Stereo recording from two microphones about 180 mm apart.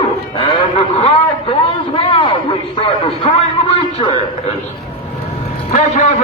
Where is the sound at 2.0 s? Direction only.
30° left (ahead or behind).